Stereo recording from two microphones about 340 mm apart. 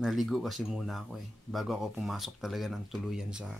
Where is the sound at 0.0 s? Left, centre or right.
Centre.